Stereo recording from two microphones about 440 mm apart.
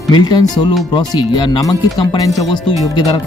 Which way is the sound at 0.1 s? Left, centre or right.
Centre.